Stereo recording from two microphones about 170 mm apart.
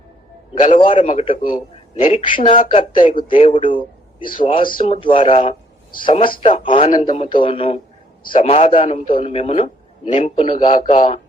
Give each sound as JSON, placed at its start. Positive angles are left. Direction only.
{"t": 0.7, "sound": "speech", "side_deg": 30}
{"t": 2.9, "sound": "speech", "side_deg": 50}
{"t": 3.2, "sound": "speech", "side_deg": 30}